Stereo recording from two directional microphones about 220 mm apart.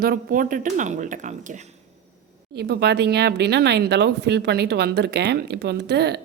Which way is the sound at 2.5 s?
50° right (ahead or behind).